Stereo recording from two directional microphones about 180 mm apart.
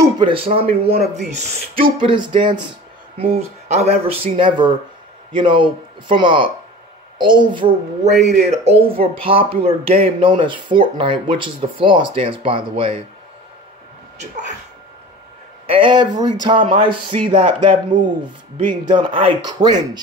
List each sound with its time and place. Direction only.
0.0 s speech: 30° right (ahead or behind)
15.6 s speech: 30° right (ahead or behind)
18.7 s speech: 25° right (ahead or behind)